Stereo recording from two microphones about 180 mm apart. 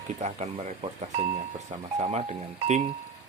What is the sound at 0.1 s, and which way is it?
Speech, 40° right (ahead or behind).